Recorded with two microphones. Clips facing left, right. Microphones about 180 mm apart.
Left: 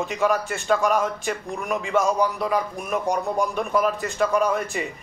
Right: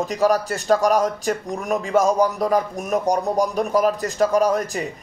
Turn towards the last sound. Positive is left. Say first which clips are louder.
# right 3 dB
turn(degrees=-40)  # may be behind; listen again after turning